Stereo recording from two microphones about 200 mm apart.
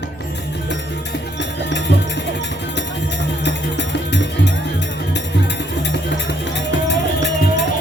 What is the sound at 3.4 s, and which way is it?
Music, 60° left (ahead or behind).